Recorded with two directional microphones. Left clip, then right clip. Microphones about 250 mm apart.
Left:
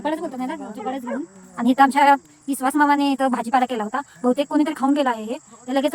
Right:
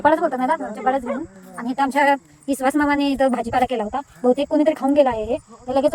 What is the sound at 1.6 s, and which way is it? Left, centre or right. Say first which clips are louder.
Speech: left 3 dB; centre.